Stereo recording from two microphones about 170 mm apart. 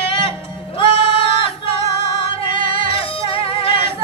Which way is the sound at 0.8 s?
30° left (ahead or behind).